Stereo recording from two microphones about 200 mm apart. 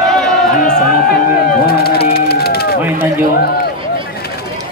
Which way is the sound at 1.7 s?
50° left (ahead or behind).